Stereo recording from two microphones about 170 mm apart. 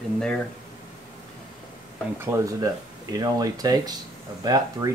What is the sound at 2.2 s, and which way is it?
Speech, 15° right (ahead or behind).